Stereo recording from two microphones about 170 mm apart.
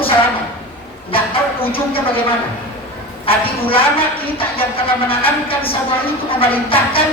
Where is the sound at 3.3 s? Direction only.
30° left (ahead or behind).